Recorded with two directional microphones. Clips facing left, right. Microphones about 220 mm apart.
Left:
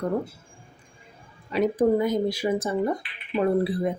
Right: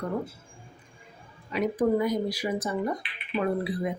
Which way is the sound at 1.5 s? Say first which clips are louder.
Left 4 dB; 30° left (ahead or behind).